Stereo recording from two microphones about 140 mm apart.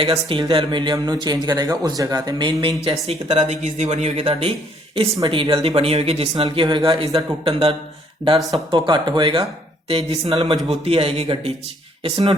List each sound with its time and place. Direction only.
0.0 s speech: 40° right (ahead or behind)
3.1 s speech: 50° right (ahead or behind); by 7.3 s 25° right (ahead or behind)
7.4 s speech: 40° right (ahead or behind)
8.4 s speech: centre (ahead or behind)
8.7 s speech: 35° right (ahead or behind)